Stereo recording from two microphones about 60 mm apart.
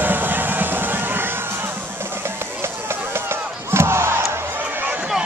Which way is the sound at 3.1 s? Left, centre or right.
Right.